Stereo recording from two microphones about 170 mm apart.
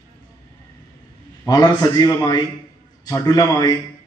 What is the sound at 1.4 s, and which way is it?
A man's voice, 25° left (ahead or behind).